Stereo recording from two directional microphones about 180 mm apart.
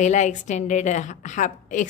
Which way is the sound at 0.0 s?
40° left (ahead or behind).